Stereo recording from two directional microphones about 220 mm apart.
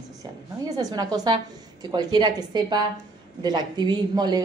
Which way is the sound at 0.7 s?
15° right (ahead or behind).